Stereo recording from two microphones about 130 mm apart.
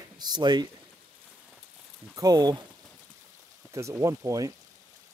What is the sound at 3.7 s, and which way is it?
Speech, 25° right (ahead or behind).